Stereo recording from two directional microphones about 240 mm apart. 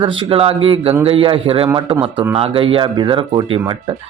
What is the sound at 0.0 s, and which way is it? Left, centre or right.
Speech, right.